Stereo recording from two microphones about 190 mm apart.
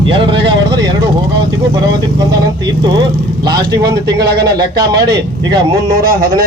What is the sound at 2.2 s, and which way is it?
Speech, 20° right (ahead or behind).